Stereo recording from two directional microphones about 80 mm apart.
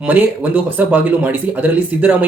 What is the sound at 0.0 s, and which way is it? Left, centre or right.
Speech, right.